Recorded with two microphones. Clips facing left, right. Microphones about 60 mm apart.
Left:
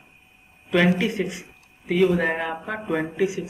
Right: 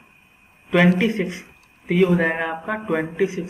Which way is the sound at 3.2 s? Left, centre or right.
Right.